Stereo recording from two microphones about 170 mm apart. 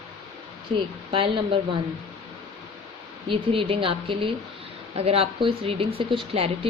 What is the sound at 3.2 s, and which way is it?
Speech, 30° right (ahead or behind).